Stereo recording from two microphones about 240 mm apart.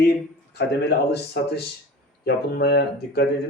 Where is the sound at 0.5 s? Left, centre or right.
Left.